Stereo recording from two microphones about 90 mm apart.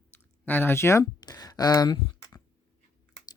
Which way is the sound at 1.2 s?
45° left (ahead or behind).